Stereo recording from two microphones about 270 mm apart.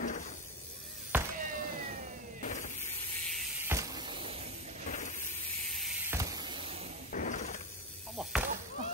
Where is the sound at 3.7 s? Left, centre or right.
Centre.